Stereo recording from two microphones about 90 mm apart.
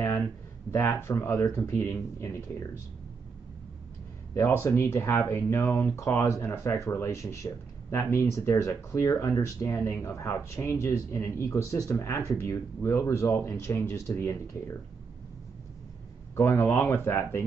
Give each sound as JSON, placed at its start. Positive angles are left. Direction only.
{"t": 0.7, "sound": "speech", "side_deg": 30}
{"t": 4.3, "sound": "speech", "side_deg": 30}
{"t": 16.3, "sound": "speech", "side_deg": 25}